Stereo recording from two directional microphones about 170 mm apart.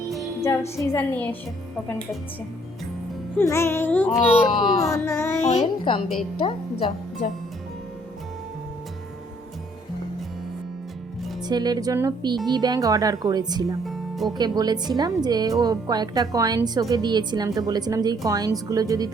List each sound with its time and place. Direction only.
0.8 s a child's voice: 15° left (ahead or behind)
3.3 s a child's voice: 15° left (ahead or behind)
4.8 s a child's voice: 20° left (ahead or behind)
5.4 s a child's voice: 45° left (ahead or behind)
6.4 s speech: 30° left (ahead or behind)
11.4 s a woman's voice: 25° right (ahead or behind)
13.8 s music: centre (ahead or behind)
14.3 s a woman's voice: 25° right (ahead or behind)